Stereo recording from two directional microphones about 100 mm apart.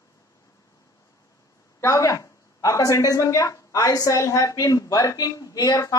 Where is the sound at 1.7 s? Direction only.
30° left (ahead or behind).